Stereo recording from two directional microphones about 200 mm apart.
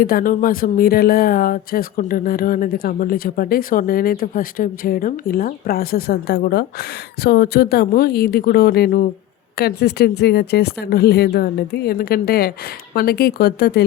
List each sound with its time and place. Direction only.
0.0 s speech: 45° left (ahead or behind)